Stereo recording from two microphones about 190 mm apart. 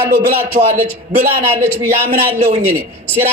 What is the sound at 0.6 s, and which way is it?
Speech, 45° right (ahead or behind).